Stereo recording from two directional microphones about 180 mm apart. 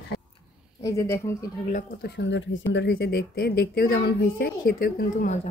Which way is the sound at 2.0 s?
75° left (ahead or behind).